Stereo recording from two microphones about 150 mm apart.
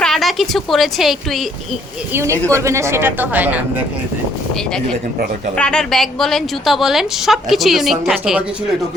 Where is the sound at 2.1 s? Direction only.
15° right (ahead or behind).